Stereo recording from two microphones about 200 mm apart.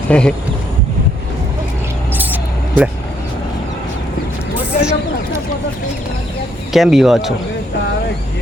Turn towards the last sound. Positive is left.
turn(degrees=0)  # may be behind; listen again after turning